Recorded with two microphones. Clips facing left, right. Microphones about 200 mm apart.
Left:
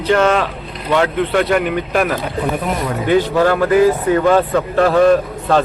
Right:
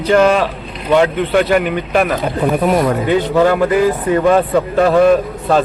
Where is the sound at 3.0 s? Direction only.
15° right (ahead or behind).